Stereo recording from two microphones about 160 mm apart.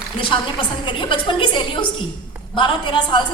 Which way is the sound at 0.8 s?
30° left (ahead or behind).